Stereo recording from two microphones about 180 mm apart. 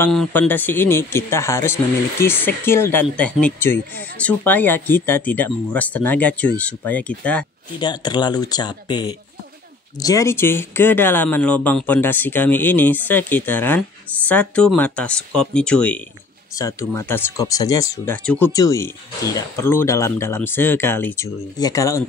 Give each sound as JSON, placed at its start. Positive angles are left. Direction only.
{"t": 0.0, "sound": "speech", "side_deg": 5}
{"t": 7.8, "sound": "speech", "side_deg": 25}
{"t": 18.5, "sound": "speech", "side_deg": 20}